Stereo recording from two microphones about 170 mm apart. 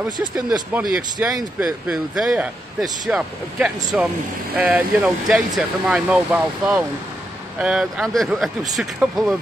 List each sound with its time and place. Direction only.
0.5 s a man's voice: 5° right (ahead or behind)